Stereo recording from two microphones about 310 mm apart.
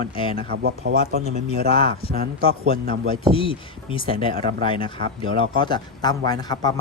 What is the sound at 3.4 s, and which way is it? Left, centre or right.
Speech, centre.